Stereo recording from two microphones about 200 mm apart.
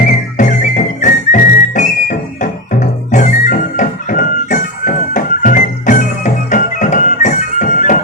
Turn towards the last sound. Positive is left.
turn(degrees=40)  # may be behind; listen again after turning